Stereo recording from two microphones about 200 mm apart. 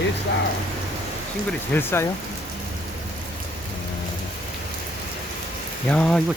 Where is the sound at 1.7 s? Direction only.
10° left (ahead or behind).